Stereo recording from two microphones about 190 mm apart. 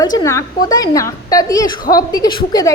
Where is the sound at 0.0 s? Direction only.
20° left (ahead or behind).